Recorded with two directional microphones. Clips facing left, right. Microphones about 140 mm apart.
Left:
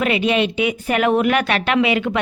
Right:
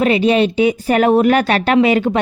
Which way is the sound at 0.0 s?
35° right (ahead or behind).